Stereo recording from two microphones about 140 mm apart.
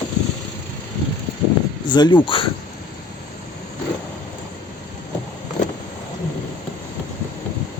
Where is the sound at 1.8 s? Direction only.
30° left (ahead or behind).